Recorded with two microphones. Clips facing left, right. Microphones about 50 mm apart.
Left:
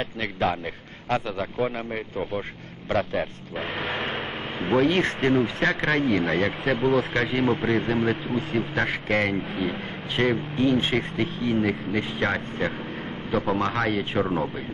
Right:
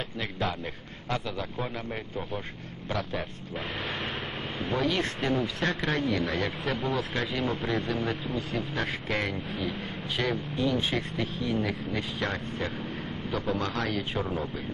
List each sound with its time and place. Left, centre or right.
0.0 s speech: left
8.7 s speech: left
9.5 s speech: left